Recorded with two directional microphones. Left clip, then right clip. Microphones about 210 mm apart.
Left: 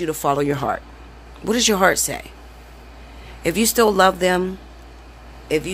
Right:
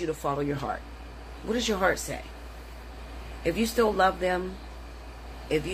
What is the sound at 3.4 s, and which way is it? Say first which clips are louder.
Speech: left 8 dB; 50° left (ahead or behind).